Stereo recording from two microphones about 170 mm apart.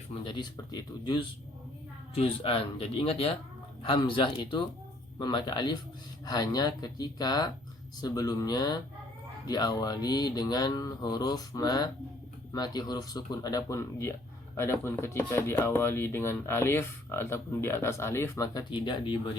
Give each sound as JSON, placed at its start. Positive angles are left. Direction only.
{"t": 0.1, "sound": "speech", "side_deg": 25}